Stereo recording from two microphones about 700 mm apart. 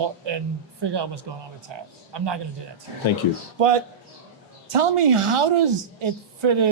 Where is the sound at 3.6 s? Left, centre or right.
Right.